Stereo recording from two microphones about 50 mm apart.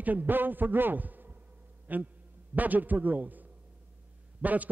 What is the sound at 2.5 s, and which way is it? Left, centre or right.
A man's voice, right.